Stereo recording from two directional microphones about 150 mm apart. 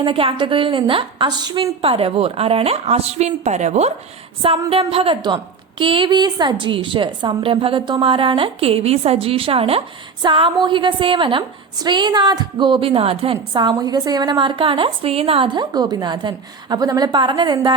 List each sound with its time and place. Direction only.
0.0 s a woman's voice: 35° right (ahead or behind)